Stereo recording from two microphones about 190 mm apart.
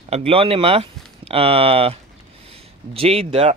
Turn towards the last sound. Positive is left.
turn(degrees=-30)  # may be behind; listen again after turning